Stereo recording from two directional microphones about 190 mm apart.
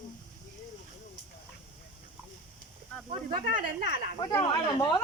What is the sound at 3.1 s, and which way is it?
Speech, 35° right (ahead or behind).